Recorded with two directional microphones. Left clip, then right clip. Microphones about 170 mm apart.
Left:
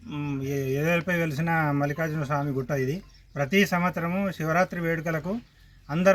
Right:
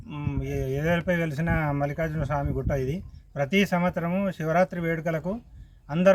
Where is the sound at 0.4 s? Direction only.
30° right (ahead or behind).